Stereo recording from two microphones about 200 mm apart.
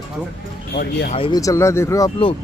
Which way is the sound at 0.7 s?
55° left (ahead or behind).